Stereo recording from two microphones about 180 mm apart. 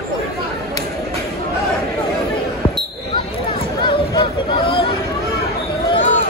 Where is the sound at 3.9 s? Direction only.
25° left (ahead or behind).